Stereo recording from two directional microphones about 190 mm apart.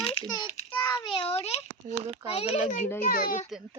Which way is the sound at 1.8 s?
40° right (ahead or behind).